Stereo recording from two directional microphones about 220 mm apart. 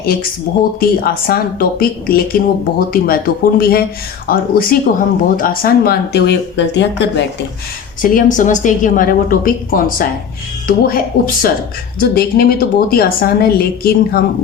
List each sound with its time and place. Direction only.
0.0 s a woman's voice: 45° left (ahead or behind)
8.0 s a woman's voice: 35° left (ahead or behind)